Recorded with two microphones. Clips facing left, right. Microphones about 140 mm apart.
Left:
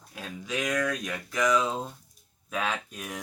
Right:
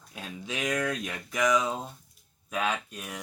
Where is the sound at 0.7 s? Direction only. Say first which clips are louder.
Even; 20° right (ahead or behind).